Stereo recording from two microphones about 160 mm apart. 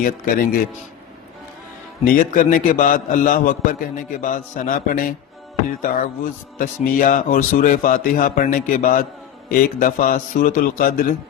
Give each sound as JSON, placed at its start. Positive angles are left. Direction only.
{"t": 0.0, "sound": "a man's voice", "side_deg": 60}
{"t": 2.0, "sound": "a man's voice", "side_deg": 60}